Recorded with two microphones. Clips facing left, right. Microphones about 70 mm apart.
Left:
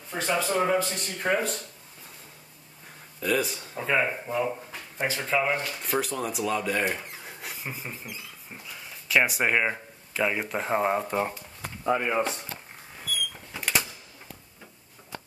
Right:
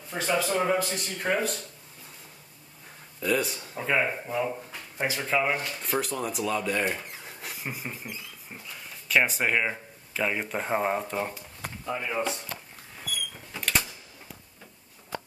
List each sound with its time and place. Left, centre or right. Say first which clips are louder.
0.1 s speech: even; centre
3.2 s speech: even; centre
4.9 s speech: even; centre
11.8 s speech: left 6 dB; left
13.5 s cash register: even; centre